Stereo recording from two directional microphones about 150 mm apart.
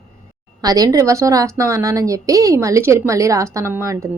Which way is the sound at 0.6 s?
25° right (ahead or behind).